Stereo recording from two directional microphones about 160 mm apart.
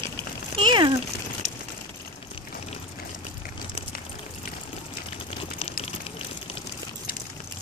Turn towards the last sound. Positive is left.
turn(degrees=40)  # may be behind; listen again after turning